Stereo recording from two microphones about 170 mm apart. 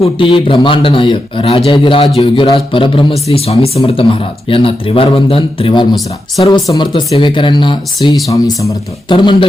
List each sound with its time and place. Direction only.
0.0 s a man's voice: 30° left (ahead or behind)